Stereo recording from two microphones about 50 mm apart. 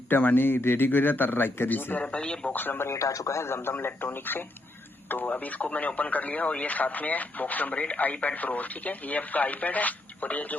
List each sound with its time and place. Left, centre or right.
0.1 s speech: left
2.0 s speech: left
2.5 s speech: left
2.9 s speech: left